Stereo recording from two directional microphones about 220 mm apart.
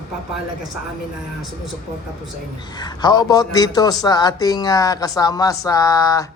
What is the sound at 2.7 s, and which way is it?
A man's voice, 20° left (ahead or behind).